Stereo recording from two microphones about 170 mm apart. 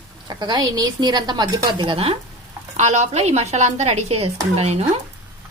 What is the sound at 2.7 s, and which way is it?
Speech, 45° right (ahead or behind).